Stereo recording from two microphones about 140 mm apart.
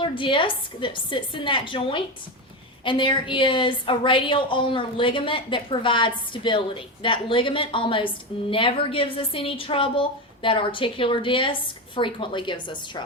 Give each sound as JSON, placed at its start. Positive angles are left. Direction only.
{"t": 0.0, "sound": "a woman's voice", "side_deg": 35}